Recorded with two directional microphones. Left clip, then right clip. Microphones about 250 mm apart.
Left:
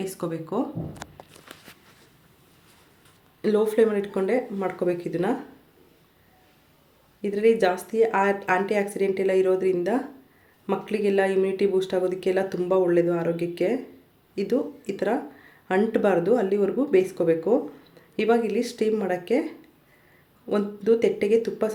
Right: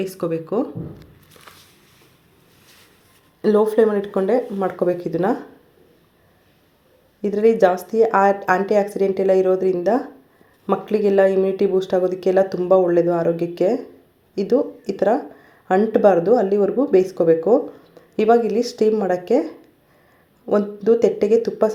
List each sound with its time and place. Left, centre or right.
0.0 s speech: centre
3.4 s speech: centre
7.2 s speech: centre